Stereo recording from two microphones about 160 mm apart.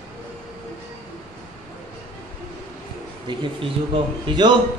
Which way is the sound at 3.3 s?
30° right (ahead or behind).